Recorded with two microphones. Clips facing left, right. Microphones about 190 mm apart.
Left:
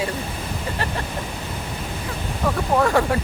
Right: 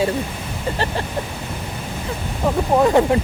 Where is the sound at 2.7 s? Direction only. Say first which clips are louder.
Right 4 dB; 20° right (ahead or behind).